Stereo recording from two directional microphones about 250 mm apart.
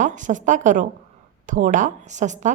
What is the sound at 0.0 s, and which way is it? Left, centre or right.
A woman's voice, right.